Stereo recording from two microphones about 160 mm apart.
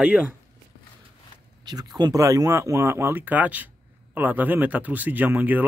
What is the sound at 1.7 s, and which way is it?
Speech, 25° right (ahead or behind).